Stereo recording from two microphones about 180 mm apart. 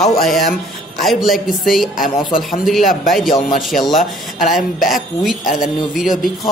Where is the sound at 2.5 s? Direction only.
Centre (ahead or behind).